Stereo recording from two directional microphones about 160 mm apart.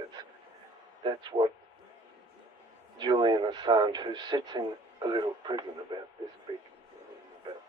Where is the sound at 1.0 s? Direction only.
25° right (ahead or behind).